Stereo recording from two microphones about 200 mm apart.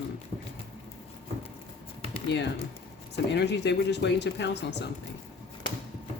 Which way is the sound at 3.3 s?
60° left (ahead or behind).